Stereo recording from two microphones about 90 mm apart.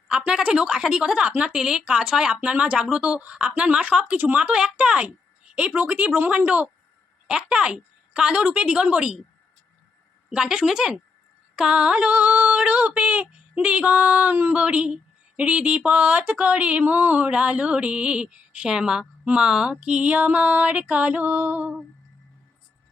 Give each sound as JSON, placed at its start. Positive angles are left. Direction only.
{"t": 0.1, "sound": "speech", "side_deg": -10}
{"t": 10.2, "sound": "speech", "side_deg": -10}